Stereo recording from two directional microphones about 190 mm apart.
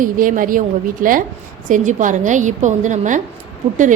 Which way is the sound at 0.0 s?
45° right (ahead or behind).